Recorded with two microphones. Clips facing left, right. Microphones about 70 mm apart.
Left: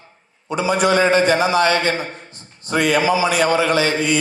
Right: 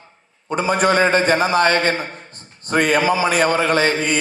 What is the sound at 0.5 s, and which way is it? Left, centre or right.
A man's voice, right.